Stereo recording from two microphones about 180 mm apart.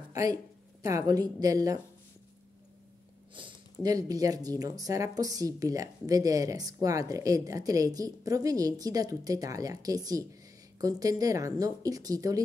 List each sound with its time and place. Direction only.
0.1 s a woman's voice: 20° right (ahead or behind)
3.8 s a woman's voice: 20° right (ahead or behind)